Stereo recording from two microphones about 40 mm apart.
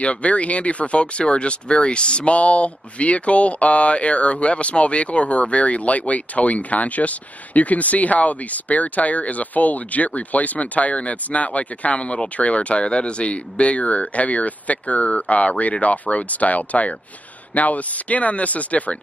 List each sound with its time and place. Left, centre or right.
0.0 s speech: left